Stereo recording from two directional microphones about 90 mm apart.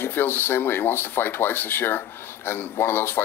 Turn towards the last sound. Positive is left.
turn(degrees=25)  # may be behind; listen again after turning